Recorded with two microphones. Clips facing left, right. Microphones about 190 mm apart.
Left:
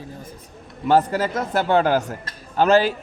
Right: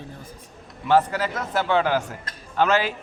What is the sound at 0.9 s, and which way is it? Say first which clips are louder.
A man's voice: left 2 dB; 40° left (ahead or behind).